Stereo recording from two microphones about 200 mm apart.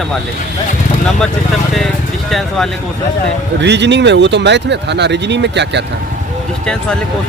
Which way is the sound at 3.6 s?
60° right (ahead or behind).